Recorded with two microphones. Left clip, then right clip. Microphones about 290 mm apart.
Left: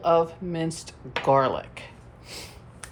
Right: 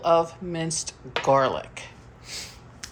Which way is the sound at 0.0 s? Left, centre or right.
Centre.